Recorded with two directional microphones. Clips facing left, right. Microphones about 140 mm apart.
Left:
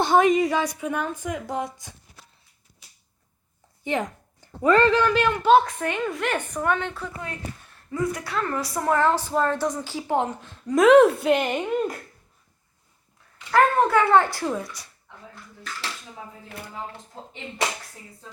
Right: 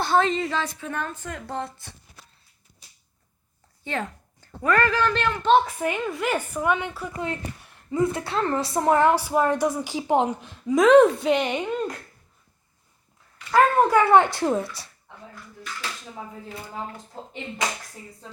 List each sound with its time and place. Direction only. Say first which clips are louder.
0.0 s a woman's voice: left 4 dB; 15° left (ahead or behind)
3.8 s a woman's voice: left 4 dB; 15° left (ahead or behind)
5.0 s a woman's voice: left 2 dB; 10° left (ahead or behind); by 7.1 s 10° right (ahead or behind)
7.6 s a woman's voice: right 3 dB; 20° right (ahead or behind)
10.7 s a woman's voice: even; centre (ahead or behind)
13.5 s a child's voice: right 1 dB; 10° right (ahead or behind); by 14.8 s 30° right (ahead or behind)